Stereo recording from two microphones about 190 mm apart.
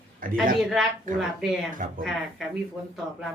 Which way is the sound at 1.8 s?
45° right (ahead or behind).